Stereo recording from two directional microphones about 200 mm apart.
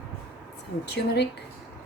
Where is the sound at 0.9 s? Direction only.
55° left (ahead or behind).